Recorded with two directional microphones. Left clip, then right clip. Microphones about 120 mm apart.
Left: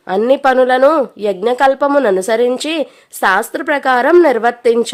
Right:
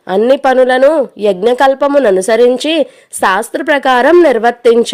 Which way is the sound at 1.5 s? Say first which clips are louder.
Right 1 dB; 35° right (ahead or behind).